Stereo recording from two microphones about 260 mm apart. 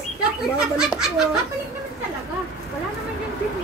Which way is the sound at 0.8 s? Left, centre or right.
Centre.